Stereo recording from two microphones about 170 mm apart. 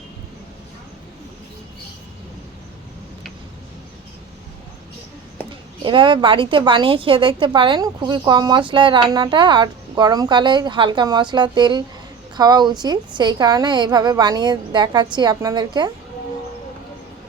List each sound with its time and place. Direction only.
5.8 s a woman's voice: 30° right (ahead or behind)